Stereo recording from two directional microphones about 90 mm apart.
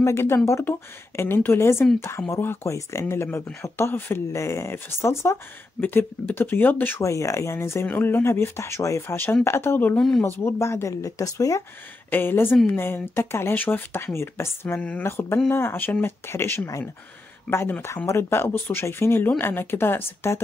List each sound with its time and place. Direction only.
0.0 s speech: 30° left (ahead or behind)
7.0 s speech: 35° left (ahead or behind)
9.9 s speech: 5° left (ahead or behind)
10.2 s speech: 25° left (ahead or behind)
12.1 s speech: 25° left (ahead or behind)
14.8 s speech: 15° left (ahead or behind)
15.0 s speech: 25° left (ahead or behind)